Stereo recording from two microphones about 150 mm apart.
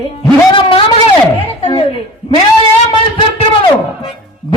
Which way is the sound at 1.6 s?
35° left (ahead or behind).